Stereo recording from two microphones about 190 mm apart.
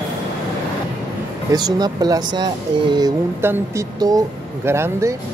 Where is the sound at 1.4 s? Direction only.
20° right (ahead or behind).